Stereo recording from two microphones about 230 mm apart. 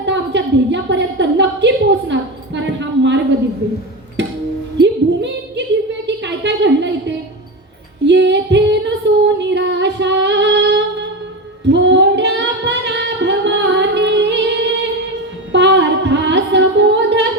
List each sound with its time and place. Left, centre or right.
0.0 s a sound: right
4.8 s female singing: right
6.1 s a sound: right
8.0 s female singing: right
9.4 s music: right
11.7 s singing: right